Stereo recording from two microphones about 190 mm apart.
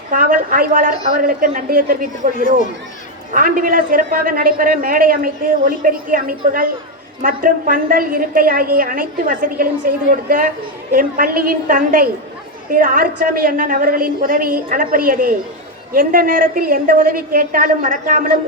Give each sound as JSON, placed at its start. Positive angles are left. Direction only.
{"t": 0.1, "sound": "a woman's voice", "side_deg": -45}